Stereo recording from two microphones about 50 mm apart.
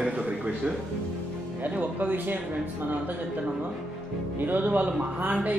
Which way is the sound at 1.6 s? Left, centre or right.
Right.